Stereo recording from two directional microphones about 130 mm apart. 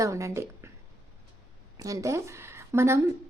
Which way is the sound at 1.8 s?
25° right (ahead or behind).